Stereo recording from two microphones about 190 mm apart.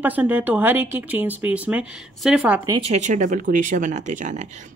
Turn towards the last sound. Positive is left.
turn(degrees=-40)  # may be behind; listen again after turning